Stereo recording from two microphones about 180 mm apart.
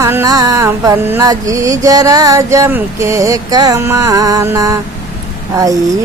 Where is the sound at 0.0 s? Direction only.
15° right (ahead or behind).